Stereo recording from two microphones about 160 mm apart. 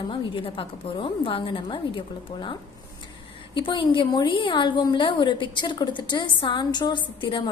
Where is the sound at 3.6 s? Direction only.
30° left (ahead or behind).